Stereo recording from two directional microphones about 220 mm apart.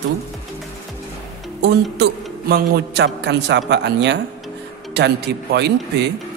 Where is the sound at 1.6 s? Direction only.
50° right (ahead or behind).